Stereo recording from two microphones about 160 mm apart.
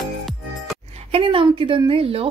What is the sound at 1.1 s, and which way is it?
Speech, 35° right (ahead or behind).